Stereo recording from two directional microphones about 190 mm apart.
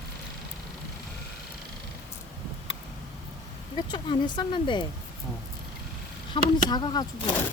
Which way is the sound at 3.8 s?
25° left (ahead or behind).